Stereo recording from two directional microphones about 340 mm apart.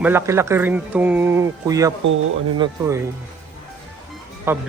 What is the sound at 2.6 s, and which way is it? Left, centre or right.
Speech, centre.